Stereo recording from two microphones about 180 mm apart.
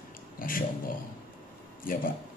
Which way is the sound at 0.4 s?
50° left (ahead or behind).